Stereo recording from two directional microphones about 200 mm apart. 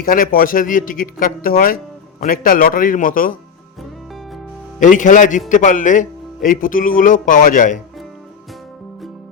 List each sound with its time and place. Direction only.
0.0 s speech: 45° left (ahead or behind)
4.8 s speech: 40° left (ahead or behind)